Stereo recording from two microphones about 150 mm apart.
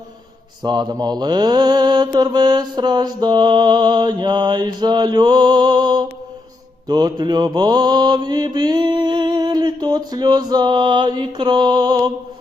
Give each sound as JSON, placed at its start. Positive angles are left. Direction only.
{"t": 0.6, "sound": "mantra", "side_deg": -30}